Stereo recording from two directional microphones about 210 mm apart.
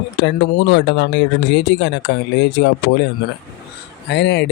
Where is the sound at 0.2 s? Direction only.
55° left (ahead or behind).